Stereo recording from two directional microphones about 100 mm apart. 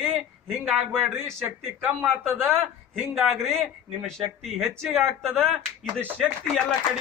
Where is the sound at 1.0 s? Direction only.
25° right (ahead or behind).